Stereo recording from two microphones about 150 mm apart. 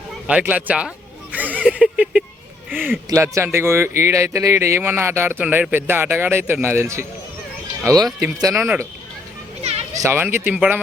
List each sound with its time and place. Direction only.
0.3 s a sound: 10° right (ahead or behind)
2.6 s a man's voice: 10° right (ahead or behind)
8.6 s a man's voice: 10° right (ahead or behind)
9.6 s children playing: 45° right (ahead or behind)
10.0 s a man's voice: 15° right (ahead or behind)